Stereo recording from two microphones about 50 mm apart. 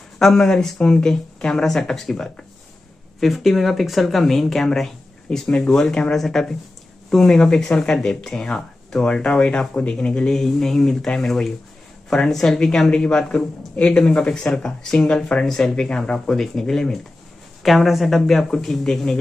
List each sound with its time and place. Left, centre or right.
0.2 s speech: centre
12.9 s speech: left
15.4 s speech: centre
17.6 s speech: centre